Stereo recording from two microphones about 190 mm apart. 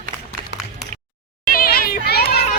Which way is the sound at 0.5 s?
65° left (ahead or behind).